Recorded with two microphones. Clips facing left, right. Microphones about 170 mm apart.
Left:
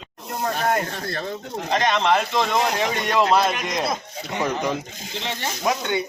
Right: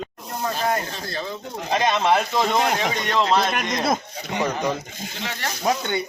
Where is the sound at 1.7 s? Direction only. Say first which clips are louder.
Even; 10° right (ahead or behind).